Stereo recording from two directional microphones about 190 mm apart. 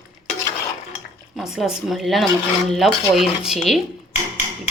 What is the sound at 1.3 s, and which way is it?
Speech, centre (ahead or behind).